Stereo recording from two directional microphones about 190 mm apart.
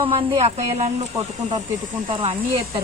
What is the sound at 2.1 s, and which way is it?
Speech, 30° right (ahead or behind).